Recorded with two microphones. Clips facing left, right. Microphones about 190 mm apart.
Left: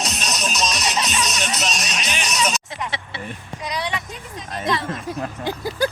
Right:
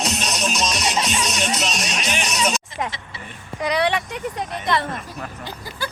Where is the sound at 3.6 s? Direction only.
65° right (ahead or behind).